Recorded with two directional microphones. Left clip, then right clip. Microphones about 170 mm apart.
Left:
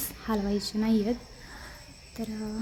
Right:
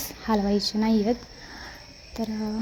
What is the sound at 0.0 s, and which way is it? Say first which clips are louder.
Speech: right 6 dB; 10° right (ahead or behind).